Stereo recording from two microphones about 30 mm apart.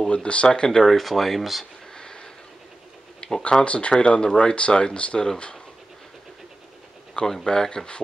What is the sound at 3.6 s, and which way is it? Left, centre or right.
Speech, left.